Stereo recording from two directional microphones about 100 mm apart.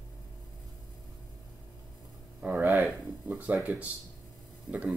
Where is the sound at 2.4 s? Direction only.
15° right (ahead or behind).